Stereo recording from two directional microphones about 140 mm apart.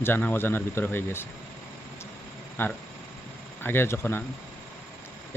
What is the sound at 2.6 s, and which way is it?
Speech, 15° left (ahead or behind).